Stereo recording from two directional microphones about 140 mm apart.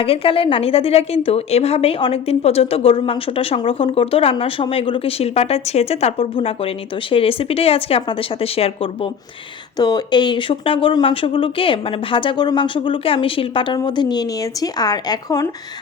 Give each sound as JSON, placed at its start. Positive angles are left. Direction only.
{"t": 0.0, "sound": "a woman's voice", "side_deg": 40}
{"t": 9.7, "sound": "speech", "side_deg": 30}